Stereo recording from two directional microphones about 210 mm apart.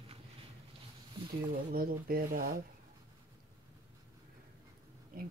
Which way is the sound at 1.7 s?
45° right (ahead or behind).